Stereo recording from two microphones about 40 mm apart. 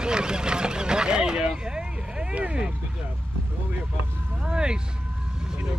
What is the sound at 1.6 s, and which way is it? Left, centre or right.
Vehicle, right.